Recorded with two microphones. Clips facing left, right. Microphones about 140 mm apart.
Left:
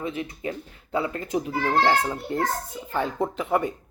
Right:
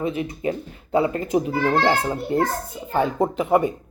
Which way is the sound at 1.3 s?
10° right (ahead or behind).